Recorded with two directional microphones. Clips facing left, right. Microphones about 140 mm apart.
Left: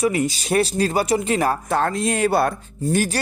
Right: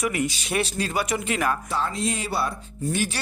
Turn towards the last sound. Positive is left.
turn(degrees=45)  # may be behind; listen again after turning